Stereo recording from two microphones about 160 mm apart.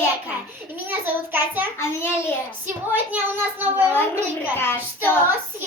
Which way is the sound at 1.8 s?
15° left (ahead or behind).